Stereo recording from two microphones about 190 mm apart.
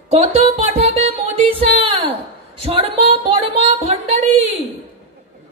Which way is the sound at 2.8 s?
30° right (ahead or behind).